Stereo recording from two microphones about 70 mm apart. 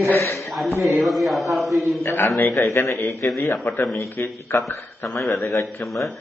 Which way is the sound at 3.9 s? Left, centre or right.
Left.